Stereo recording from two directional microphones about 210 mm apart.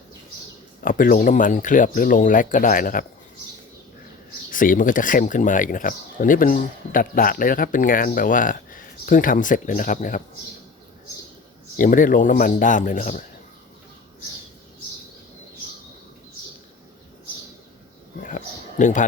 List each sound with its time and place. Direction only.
0.8 s speech: 40° left (ahead or behind)
4.5 s speech: 40° left (ahead or behind)
11.8 s speech: 40° left (ahead or behind)
18.2 s a sound: 35° left (ahead or behind)